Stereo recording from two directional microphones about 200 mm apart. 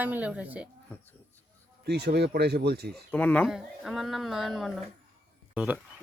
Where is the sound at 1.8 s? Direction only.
55° right (ahead or behind).